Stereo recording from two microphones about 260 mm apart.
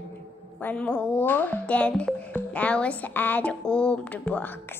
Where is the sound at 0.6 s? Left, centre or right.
Centre.